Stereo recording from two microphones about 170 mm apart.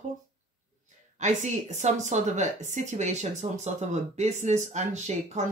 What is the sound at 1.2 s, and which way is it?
Speech, 45° right (ahead or behind).